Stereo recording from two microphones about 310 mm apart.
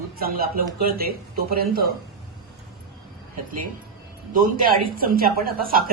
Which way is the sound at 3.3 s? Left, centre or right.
Right.